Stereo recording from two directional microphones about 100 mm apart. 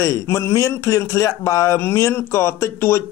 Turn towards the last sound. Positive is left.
turn(degrees=25)  # may be behind; listen again after turning